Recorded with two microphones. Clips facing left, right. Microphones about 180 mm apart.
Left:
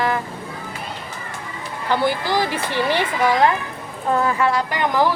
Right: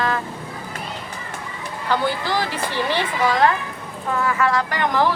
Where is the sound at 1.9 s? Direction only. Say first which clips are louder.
Left 2 dB; 15° left (ahead or behind).